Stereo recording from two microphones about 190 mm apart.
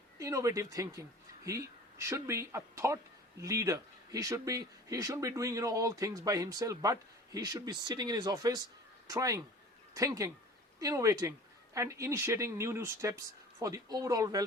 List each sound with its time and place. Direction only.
0.2 s speech: 15° right (ahead or behind)